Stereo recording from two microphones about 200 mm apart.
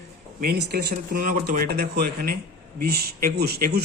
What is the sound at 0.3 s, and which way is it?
A man's voice, 50° right (ahead or behind).